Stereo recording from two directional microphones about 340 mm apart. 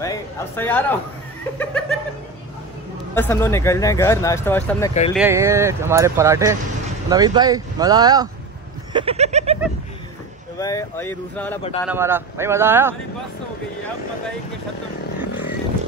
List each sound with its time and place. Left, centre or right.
0.0 s speech: centre
1.6 s a sound: centre
3.2 s speech: centre
5.1 s speech: centre
10.6 s speech: centre
11.8 s speech: centre